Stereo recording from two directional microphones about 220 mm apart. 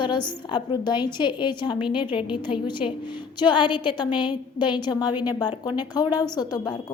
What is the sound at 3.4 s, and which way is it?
A woman's voice, 20° left (ahead or behind).